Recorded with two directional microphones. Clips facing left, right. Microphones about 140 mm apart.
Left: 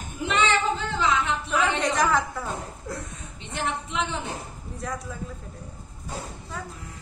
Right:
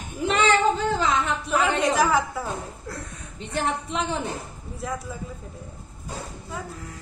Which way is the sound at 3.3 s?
40° right (ahead or behind).